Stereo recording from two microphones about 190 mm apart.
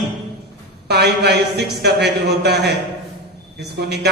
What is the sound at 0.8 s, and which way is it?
Speech, 60° right (ahead or behind).